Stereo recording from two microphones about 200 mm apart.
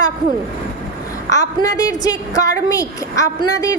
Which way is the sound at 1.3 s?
15° left (ahead or behind).